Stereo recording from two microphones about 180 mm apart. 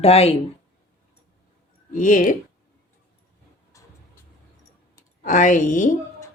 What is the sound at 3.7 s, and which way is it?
Vehicle, 20° left (ahead or behind).